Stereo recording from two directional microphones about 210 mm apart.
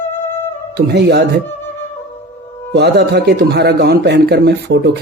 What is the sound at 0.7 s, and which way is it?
Speech, 50° right (ahead or behind).